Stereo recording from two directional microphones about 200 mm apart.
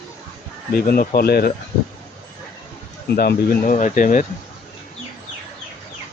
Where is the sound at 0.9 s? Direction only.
50° left (ahead or behind).